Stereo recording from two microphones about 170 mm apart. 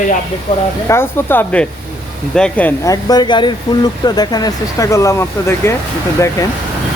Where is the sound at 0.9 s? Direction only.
15° left (ahead or behind).